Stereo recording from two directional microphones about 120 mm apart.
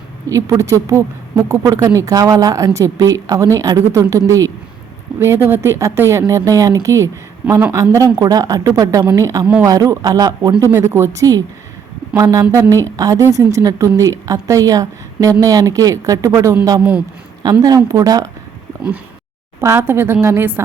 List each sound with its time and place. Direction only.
0.3 s a woman's voice: 25° right (ahead or behind)
10.7 s a woman's voice: 20° right (ahead or behind)
19.6 s a woman's voice: 20° right (ahead or behind)